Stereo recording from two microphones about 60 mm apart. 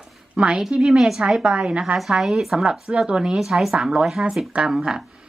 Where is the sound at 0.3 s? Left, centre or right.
Centre.